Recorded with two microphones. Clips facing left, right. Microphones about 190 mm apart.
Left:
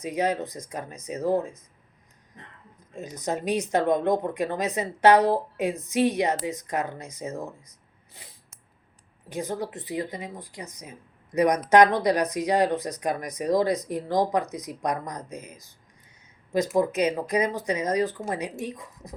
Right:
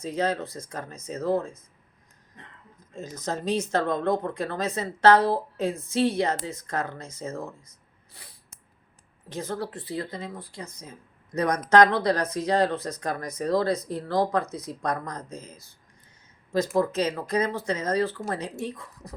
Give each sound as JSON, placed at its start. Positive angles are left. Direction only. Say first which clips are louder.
{"t": 0.0, "sound": "speech", "louder": "left 1 dB", "side_deg": 15}
{"t": 2.9, "sound": "speech", "louder": "left 2 dB", "side_deg": 15}
{"t": 9.3, "sound": "speech", "louder": "left 1 dB", "side_deg": 15}